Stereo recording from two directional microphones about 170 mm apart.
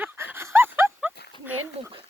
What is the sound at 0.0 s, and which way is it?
Dog, 10° right (ahead or behind).